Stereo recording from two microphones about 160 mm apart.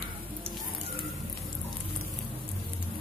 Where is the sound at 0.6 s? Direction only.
Centre (ahead or behind).